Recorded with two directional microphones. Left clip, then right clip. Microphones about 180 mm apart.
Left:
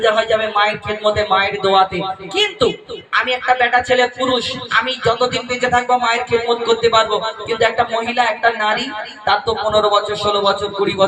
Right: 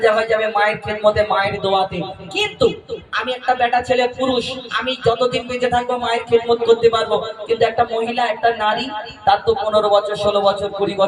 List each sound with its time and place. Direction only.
0.0 s a man's voice: 15° right (ahead or behind)
2.4 s a man's voice: 15° right (ahead or behind)